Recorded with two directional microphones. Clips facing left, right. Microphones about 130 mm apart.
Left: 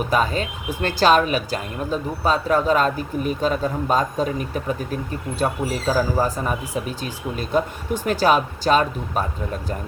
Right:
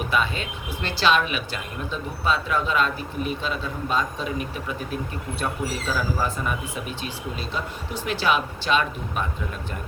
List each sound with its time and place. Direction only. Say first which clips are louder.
0.1 s speech: left 4 dB; 40° left (ahead or behind)